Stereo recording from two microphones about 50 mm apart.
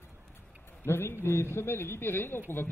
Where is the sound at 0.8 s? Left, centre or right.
Left.